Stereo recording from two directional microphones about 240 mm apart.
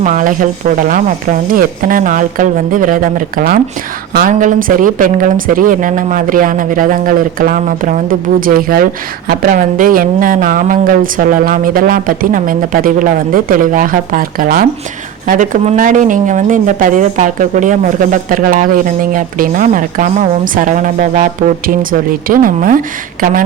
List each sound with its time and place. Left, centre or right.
0.0 s a woman's voice: right
22.3 s a woman's voice: right